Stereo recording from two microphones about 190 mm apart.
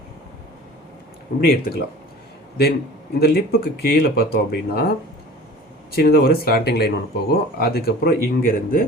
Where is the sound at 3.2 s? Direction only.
55° left (ahead or behind).